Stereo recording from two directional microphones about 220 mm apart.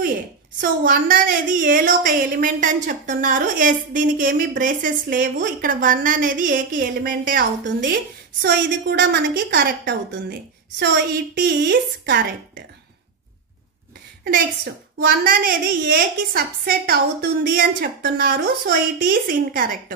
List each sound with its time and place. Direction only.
0.6 s a woman's voice: 40° right (ahead or behind)
14.2 s a woman's voice: 45° right (ahead or behind)